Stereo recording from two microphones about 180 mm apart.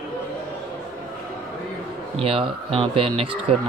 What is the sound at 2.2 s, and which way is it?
Speech, 30° right (ahead or behind).